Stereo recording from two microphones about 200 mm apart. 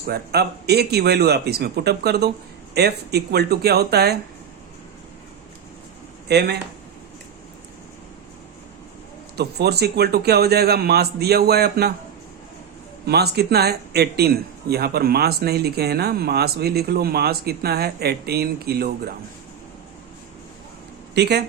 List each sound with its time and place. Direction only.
0.0 s a man's voice: 55° right (ahead or behind)
6.2 s speech: 55° right (ahead or behind)
9.3 s a man's voice: 55° right (ahead or behind)
13.1 s a man's voice: 55° right (ahead or behind)
21.2 s speech: 55° right (ahead or behind)